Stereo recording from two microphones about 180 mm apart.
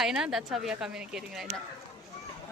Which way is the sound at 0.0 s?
5° right (ahead or behind).